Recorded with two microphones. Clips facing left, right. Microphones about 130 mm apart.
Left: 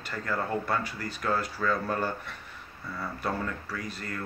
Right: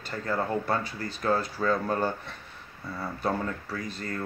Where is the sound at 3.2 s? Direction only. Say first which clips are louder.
Right 3 dB; 30° right (ahead or behind).